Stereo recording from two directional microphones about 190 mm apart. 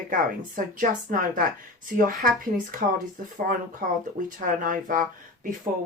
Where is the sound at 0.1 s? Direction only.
45° right (ahead or behind).